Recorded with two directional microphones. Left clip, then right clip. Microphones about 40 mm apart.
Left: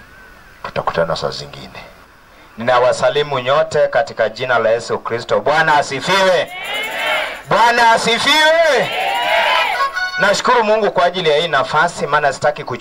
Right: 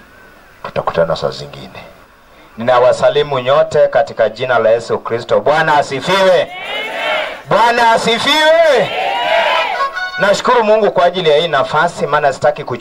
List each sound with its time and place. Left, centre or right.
0.6 s a man's voice: left
2.6 s a man's voice: left
9.5 s music: left
10.1 s a man's voice: left